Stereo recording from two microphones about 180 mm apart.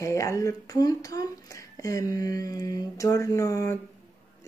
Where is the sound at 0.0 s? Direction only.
15° left (ahead or behind).